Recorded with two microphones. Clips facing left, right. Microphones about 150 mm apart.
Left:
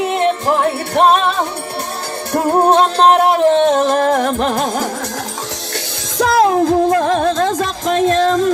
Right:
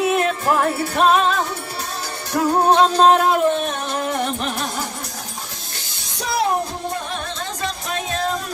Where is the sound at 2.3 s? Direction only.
55° left (ahead or behind); by 4.6 s 90° left.